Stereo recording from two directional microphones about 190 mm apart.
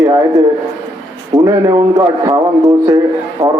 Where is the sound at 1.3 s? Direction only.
15° right (ahead or behind).